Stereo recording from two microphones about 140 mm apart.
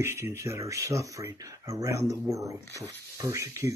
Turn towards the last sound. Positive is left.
turn(degrees=-20)  # may be behind; listen again after turning